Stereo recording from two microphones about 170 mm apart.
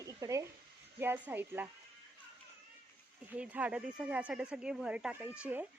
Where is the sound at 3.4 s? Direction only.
5° right (ahead or behind).